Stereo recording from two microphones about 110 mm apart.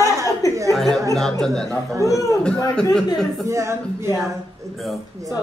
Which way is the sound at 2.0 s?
30° left (ahead or behind).